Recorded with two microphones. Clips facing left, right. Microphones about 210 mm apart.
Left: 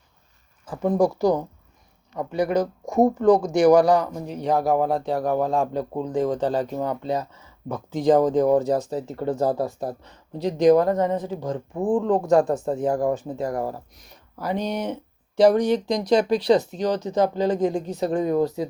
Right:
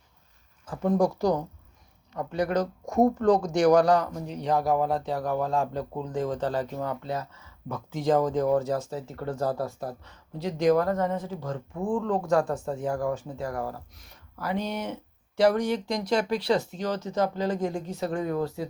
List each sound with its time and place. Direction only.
0.6 s speech: 10° left (ahead or behind)
11.7 s speech: 35° left (ahead or behind)
11.9 s speech: 20° left (ahead or behind)